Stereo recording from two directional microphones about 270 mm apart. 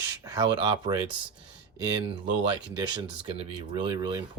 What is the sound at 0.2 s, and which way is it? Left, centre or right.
Speech, centre.